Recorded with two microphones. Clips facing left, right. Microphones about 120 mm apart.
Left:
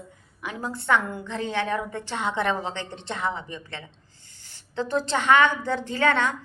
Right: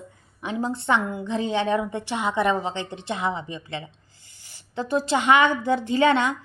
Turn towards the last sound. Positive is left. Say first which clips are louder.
# right 3 dB
turn(degrees=-15)  # may be behind; listen again after turning